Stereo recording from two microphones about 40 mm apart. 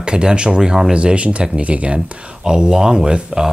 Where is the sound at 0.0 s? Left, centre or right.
Right.